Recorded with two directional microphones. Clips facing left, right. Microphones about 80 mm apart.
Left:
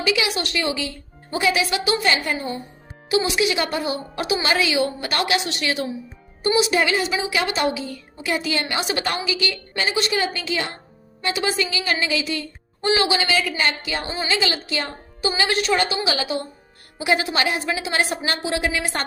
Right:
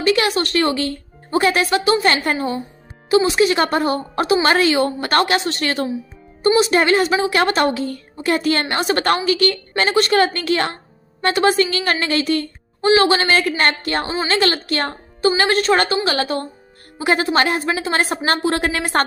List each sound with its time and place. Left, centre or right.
0.0 s a woman's voice: right